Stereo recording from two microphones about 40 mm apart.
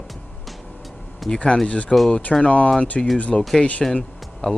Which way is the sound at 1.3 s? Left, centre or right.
Left.